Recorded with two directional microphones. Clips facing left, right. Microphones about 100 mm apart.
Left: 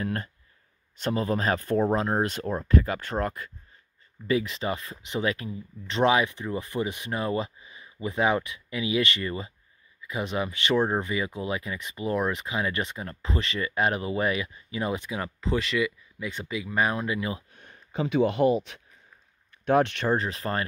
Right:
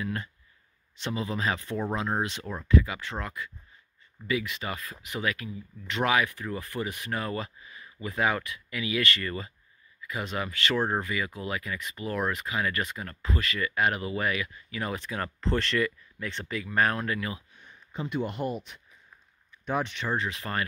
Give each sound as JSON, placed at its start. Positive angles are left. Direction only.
{"t": 0.0, "sound": "speech", "side_deg": 45}
{"t": 4.3, "sound": "speech", "side_deg": 30}
{"t": 17.5, "sound": "speech", "side_deg": 60}
{"t": 19.5, "sound": "speech", "side_deg": 70}
{"t": 20.1, "sound": "speech", "side_deg": 40}